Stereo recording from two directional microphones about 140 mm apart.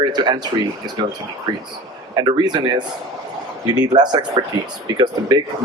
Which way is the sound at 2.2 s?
30° right (ahead or behind).